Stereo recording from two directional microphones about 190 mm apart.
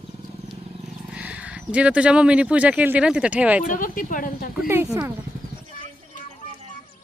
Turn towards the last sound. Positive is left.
turn(degrees=-15)  # may be behind; listen again after turning